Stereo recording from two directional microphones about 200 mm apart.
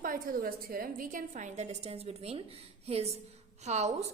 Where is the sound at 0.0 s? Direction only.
45° right (ahead or behind).